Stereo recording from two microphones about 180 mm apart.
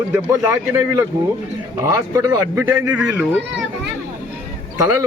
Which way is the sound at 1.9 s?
20° right (ahead or behind).